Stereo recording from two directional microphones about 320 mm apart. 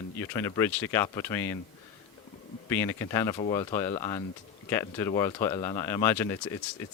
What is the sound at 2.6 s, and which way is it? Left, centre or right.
Speech, centre.